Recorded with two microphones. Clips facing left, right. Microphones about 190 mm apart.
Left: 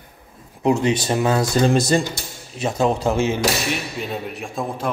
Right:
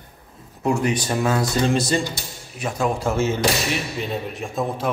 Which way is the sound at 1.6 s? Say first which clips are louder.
Left 4 dB; 45° left (ahead or behind).